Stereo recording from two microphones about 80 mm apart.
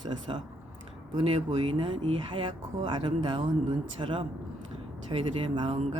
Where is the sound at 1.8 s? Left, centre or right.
Right.